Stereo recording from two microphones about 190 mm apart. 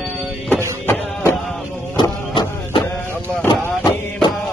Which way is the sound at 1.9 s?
25° left (ahead or behind).